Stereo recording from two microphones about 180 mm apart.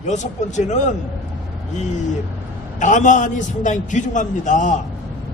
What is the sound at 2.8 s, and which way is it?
A man's voice, 45° left (ahead or behind).